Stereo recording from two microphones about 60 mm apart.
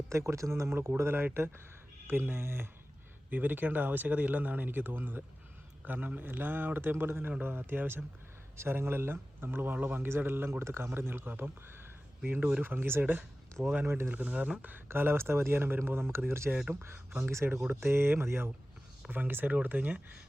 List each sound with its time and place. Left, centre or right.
0.1 s speech: right
12.2 s speech: right
12.6 s speech: right
14.1 s speech: right
14.8 s speech: right
19.0 s speech: right